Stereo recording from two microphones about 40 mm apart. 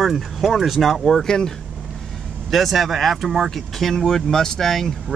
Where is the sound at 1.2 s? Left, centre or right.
Centre.